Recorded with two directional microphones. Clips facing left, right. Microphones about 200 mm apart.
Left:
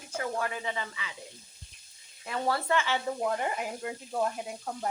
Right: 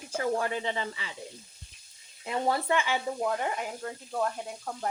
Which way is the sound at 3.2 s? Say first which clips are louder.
Even; centre (ahead or behind).